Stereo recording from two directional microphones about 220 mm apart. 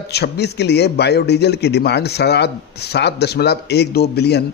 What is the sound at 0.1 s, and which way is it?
A man's voice, 50° left (ahead or behind).